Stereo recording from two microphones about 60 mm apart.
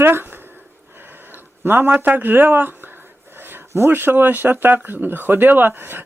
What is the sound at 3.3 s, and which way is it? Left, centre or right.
Dog, right.